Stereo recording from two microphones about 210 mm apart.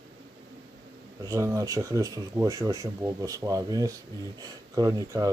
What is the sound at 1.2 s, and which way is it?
Speech, 15° right (ahead or behind).